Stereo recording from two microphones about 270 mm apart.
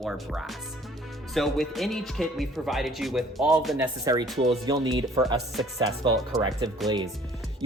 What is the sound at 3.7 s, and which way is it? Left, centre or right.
Speech, centre.